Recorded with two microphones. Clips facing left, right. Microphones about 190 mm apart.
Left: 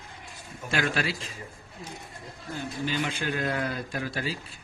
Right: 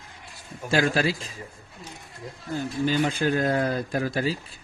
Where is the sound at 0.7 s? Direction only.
35° right (ahead or behind).